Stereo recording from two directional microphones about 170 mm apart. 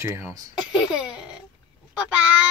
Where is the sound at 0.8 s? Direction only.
5° right (ahead or behind).